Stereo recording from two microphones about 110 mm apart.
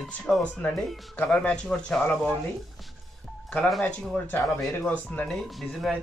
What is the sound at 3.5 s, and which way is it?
Speech, 5° left (ahead or behind).